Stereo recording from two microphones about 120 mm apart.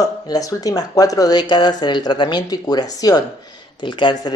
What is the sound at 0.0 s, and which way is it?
Speech, 30° left (ahead or behind).